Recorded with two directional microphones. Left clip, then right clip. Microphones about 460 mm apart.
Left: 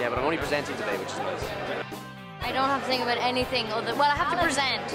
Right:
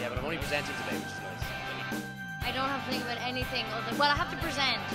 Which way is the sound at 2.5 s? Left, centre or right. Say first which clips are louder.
Left 9 dB; right.